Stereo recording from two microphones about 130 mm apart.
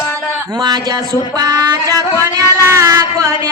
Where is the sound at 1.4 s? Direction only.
25° right (ahead or behind).